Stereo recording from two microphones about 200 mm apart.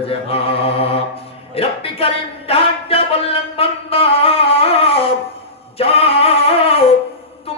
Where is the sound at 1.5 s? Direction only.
30° left (ahead or behind).